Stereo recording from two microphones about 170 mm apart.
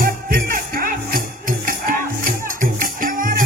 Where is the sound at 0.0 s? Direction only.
55° right (ahead or behind).